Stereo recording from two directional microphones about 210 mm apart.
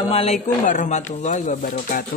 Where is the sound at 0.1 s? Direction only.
30° left (ahead or behind).